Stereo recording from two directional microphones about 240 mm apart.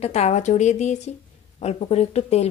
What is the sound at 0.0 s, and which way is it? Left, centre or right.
A woman's voice, left.